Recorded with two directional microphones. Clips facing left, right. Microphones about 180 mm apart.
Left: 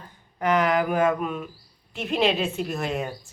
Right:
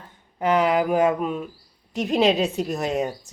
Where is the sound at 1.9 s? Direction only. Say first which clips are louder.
Right 4 dB; 40° right (ahead or behind).